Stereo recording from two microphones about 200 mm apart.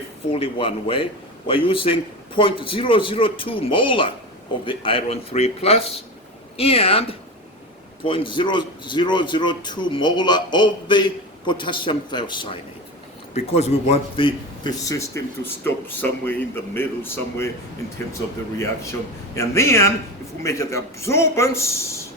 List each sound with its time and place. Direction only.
0.3 s a man's voice: 30° left (ahead or behind); by 17.5 s 10° left (ahead or behind)
19.4 s a man's voice: 15° left (ahead or behind)